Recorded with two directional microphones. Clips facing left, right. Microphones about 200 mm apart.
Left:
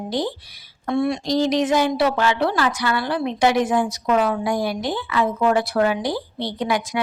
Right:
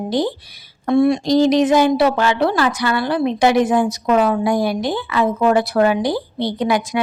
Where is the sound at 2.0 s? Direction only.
50° right (ahead or behind).